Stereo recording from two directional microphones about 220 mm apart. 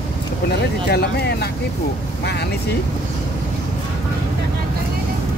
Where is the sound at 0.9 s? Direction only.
50° left (ahead or behind).